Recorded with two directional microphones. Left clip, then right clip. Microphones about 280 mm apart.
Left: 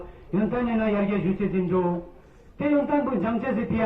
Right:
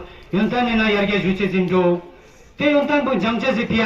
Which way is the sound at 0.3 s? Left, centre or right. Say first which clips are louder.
Right 7 dB; right.